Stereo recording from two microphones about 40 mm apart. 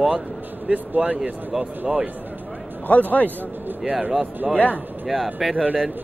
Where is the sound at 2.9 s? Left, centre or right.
Left.